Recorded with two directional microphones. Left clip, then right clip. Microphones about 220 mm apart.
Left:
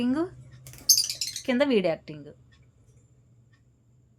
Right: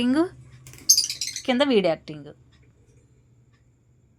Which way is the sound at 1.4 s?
5° right (ahead or behind).